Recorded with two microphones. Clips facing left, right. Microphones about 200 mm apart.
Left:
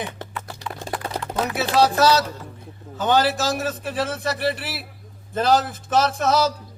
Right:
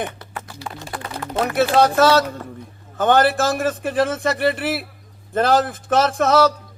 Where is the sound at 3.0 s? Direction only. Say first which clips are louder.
Right 4 dB; 55° right (ahead or behind).